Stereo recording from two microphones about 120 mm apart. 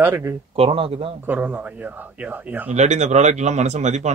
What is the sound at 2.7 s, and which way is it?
Speech, 75° right (ahead or behind).